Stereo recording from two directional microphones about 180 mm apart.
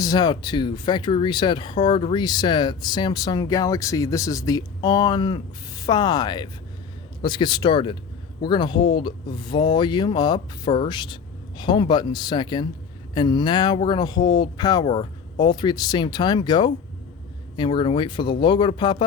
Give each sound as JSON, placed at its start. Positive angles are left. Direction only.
{"t": 0.0, "sound": "speech", "side_deg": 20}